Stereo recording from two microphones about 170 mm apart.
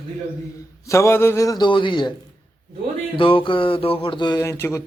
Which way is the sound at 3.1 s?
30° left (ahead or behind).